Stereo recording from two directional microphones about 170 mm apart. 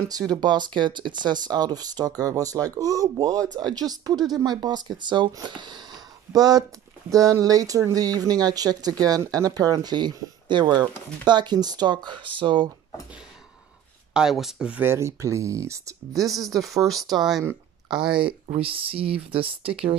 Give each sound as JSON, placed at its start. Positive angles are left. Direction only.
{"t": 0.1, "sound": "speech", "side_deg": -25}
{"t": 14.1, "sound": "speech", "side_deg": -5}
{"t": 16.3, "sound": "speech", "side_deg": 0}
{"t": 18.5, "sound": "speech", "side_deg": -35}